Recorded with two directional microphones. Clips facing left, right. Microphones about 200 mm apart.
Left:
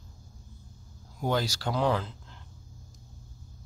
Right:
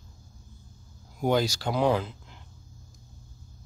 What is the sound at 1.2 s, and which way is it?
Speech, 15° right (ahead or behind).